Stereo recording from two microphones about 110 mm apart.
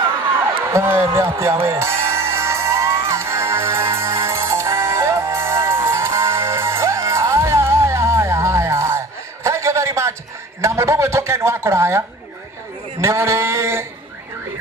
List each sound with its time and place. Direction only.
0.7 s speech: 20° right (ahead or behind)
1.4 s music: 25° right (ahead or behind)
10.6 s speech: 25° right (ahead or behind)
13.0 s a sound: 25° right (ahead or behind)